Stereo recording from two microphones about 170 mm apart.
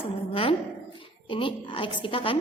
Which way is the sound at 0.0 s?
35° left (ahead or behind).